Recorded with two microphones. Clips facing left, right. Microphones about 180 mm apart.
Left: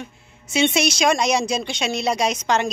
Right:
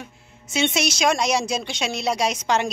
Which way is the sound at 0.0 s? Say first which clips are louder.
Left 3 dB; centre (ahead or behind).